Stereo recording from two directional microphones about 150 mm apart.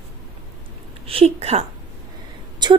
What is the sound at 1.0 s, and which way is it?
Speech, 40° right (ahead or behind).